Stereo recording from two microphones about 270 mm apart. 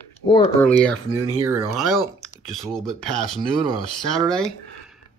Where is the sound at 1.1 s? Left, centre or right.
Right.